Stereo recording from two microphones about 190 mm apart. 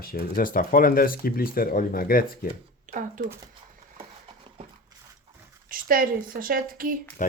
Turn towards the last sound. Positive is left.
turn(degrees=-50)  # may be behind; listen again after turning